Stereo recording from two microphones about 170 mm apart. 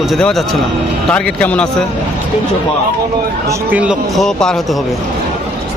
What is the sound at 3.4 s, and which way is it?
Speech, 10° right (ahead or behind).